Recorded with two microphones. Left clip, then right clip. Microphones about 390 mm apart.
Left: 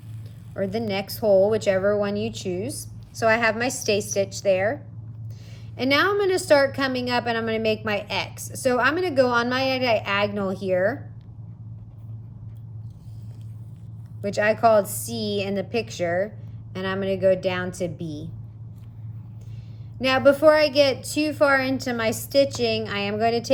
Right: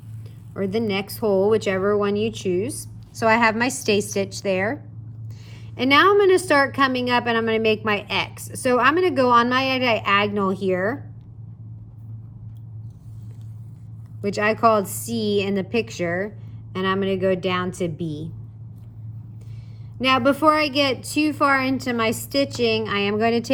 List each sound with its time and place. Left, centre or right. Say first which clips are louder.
0.6 s a woman's voice: right 2 dB; centre
14.2 s a woman's voice: right 1 dB; centre
20.0 s a woman's voice: left 1 dB; centre